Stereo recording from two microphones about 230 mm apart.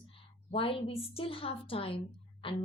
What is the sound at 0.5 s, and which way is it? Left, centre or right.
A woman's voice, left.